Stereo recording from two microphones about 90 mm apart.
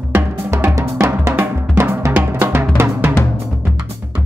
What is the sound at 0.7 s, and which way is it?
Drum, 30° right (ahead or behind).